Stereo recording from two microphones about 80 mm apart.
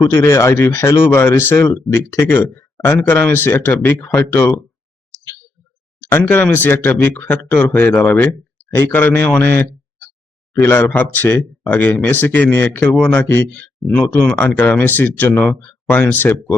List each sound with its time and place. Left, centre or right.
0.1 s speech: left
6.0 s speech: left
10.5 s speech: left
12.9 s speech: centre
13.2 s speech: left